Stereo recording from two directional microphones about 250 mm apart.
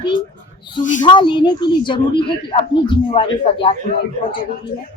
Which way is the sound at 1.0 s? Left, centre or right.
Centre.